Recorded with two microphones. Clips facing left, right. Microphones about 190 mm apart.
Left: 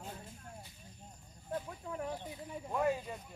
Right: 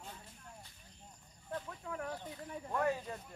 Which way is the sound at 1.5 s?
20° left (ahead or behind).